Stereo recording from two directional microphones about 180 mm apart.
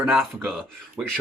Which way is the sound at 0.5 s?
5° left (ahead or behind).